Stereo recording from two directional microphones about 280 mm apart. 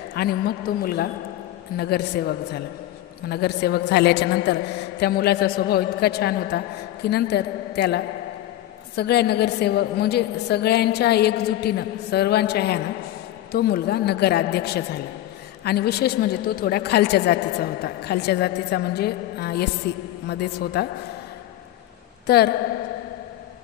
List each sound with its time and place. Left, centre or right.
0.1 s a woman's voice: left
22.2 s a woman's voice: left